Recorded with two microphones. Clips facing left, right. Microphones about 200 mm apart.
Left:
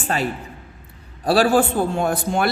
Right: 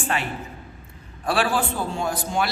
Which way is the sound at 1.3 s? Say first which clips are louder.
Left 7 dB; 40° left (ahead or behind).